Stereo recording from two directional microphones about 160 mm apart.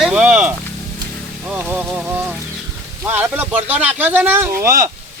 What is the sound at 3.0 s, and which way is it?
Speech, 15° right (ahead or behind).